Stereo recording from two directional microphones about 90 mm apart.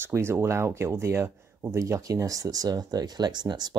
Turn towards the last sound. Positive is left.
turn(degrees=-50)  # may be behind; listen again after turning